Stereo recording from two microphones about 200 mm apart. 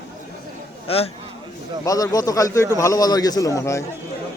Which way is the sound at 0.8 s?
30° left (ahead or behind).